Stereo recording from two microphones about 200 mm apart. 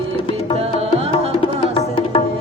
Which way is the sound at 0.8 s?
30° right (ahead or behind).